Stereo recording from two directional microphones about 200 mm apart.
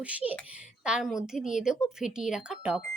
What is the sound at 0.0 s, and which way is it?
A woman's voice, 5° right (ahead or behind).